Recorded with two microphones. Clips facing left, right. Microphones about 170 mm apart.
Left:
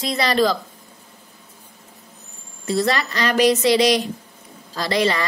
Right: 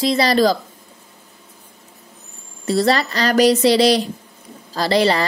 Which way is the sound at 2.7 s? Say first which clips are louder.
Right 4 dB; 35° right (ahead or behind).